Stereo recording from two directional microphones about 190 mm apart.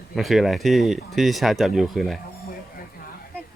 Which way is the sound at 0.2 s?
Centre (ahead or behind).